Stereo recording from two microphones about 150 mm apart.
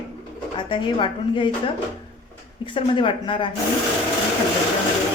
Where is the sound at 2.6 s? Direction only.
35° left (ahead or behind).